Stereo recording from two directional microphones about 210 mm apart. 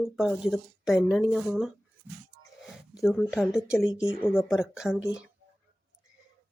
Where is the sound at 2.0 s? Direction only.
10° right (ahead or behind).